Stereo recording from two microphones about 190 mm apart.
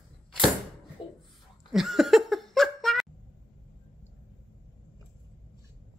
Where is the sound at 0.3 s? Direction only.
Centre (ahead or behind).